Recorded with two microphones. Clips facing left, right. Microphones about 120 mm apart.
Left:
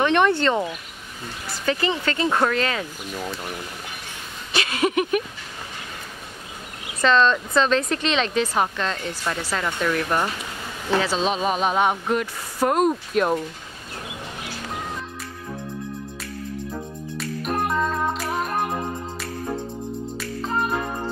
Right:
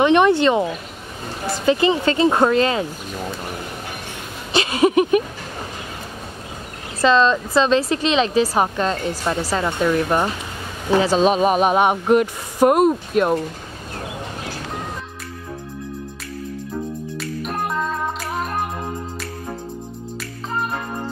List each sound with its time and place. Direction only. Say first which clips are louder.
0.0 s speech: right 5 dB; 15° right (ahead or behind)
1.7 s speech: right 6 dB; 20° right (ahead or behind)
4.5 s a sound: right 6 dB; 25° right (ahead or behind)
7.0 s speech: right 3 dB; 5° right (ahead or behind)
8.7 s a woman's voice: right 6 dB; 40° right (ahead or behind)
9.6 s speech: right 4 dB; 25° right (ahead or behind)
12.8 s speech: right 4 dB; 5° right (ahead or behind)
17.2 s music: left 2 dB; centre (ahead or behind)
20.2 s music: even; centre (ahead or behind)